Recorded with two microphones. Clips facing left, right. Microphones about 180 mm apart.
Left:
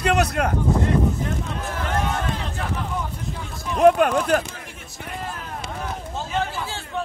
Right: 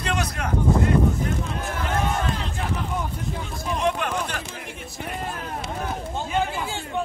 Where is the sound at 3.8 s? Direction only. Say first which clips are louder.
Left 10 dB; 50° left (ahead or behind).